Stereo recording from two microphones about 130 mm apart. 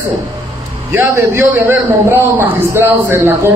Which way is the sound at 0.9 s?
20° right (ahead or behind).